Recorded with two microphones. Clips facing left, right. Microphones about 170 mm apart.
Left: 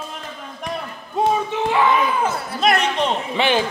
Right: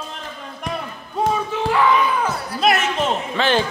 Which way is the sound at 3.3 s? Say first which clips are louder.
Even; 15° left (ahead or behind).